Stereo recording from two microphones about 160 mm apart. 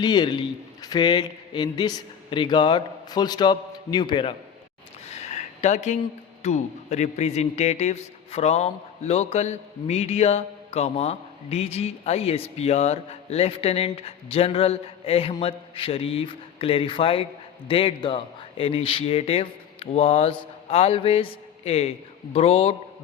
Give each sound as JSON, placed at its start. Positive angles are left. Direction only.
{"t": 0.0, "sound": "a man's voice", "side_deg": 25}
{"t": 5.1, "sound": "a sound", "side_deg": 45}
{"t": 6.4, "sound": "a man's voice", "side_deg": 45}